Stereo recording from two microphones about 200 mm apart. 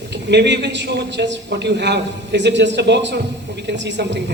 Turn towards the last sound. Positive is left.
turn(degrees=-60)  # may be behind; listen again after turning